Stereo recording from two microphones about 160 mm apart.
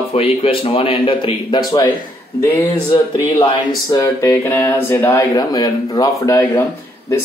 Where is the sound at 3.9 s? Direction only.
20° left (ahead or behind).